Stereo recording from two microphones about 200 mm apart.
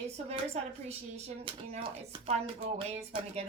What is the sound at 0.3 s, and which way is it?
Speech, 30° right (ahead or behind).